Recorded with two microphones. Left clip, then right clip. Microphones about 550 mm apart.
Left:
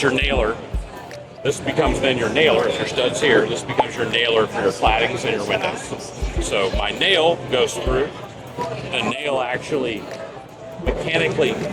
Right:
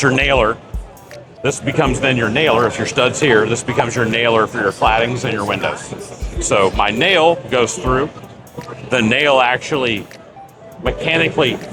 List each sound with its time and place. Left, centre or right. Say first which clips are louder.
0.0 s speech: right 5 dB; right
8.9 s speech: right 10 dB; right
11.0 s speech: right 4 dB; right